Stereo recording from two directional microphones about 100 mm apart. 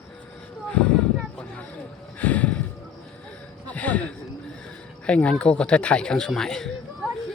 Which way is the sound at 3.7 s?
15° left (ahead or behind).